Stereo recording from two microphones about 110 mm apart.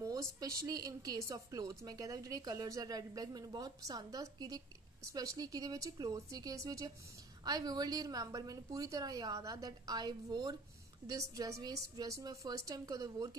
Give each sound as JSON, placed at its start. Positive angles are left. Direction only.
{"t": 0.0, "sound": "a woman's voice", "side_deg": -30}